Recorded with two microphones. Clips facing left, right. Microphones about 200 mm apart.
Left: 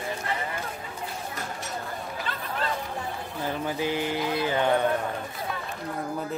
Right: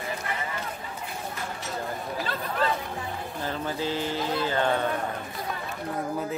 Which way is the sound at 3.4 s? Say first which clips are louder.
Left 2 dB; 15° left (ahead or behind).